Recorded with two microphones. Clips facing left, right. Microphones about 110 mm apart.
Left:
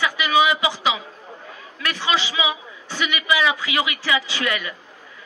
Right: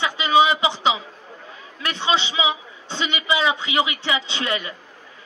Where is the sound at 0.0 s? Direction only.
25° right (ahead or behind).